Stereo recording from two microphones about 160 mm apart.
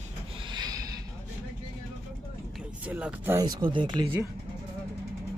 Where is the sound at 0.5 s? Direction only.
25° right (ahead or behind).